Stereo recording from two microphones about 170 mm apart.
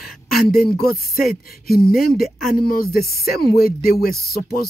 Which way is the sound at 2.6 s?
60° left (ahead or behind).